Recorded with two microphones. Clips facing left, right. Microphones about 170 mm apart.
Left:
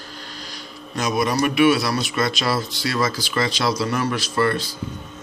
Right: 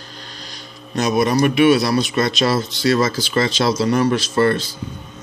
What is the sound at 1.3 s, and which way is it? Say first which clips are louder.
Speech: right 2 dB; 20° right (ahead or behind).